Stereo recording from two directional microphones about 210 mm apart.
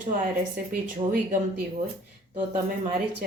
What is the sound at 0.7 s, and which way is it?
Speech, 35° right (ahead or behind).